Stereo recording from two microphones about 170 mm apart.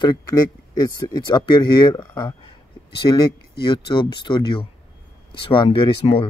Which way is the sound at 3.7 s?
25° left (ahead or behind).